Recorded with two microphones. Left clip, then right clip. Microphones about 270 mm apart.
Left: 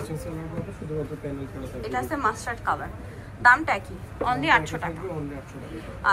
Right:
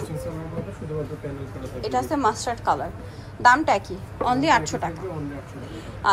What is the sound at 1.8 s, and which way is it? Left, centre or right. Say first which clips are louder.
A woman's voice: right 4 dB; centre.